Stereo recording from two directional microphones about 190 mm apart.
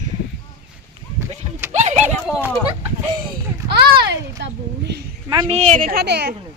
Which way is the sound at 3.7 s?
60° right (ahead or behind).